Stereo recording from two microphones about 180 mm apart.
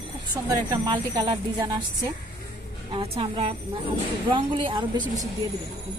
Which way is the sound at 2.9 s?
30° right (ahead or behind).